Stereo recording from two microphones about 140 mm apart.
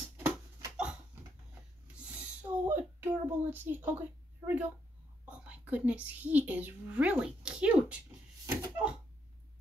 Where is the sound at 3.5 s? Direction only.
15° right (ahead or behind).